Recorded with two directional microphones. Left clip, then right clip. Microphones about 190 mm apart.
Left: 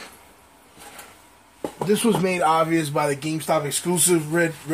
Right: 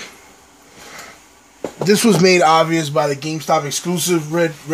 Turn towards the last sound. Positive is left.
turn(degrees=10)  # may be behind; listen again after turning